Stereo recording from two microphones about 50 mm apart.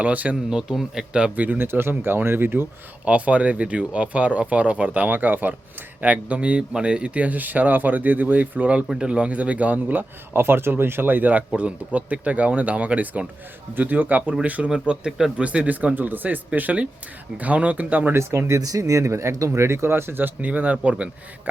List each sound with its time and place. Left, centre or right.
0.0 s a man's voice: right
0.5 s a man's voice: centre
1.4 s speech: right
3.0 s a man's voice: right
8.9 s a man's voice: centre; by 14.7 s right
14.7 s a man's voice: centre
15.4 s a man's voice: right
18.1 s speech: right
20.5 s speech: right